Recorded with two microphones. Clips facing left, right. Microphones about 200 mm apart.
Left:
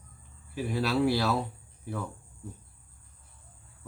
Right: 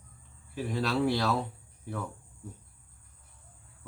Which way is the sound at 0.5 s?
5° left (ahead or behind).